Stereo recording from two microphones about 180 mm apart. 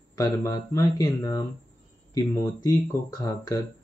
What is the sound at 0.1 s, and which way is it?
Speech, 20° left (ahead or behind).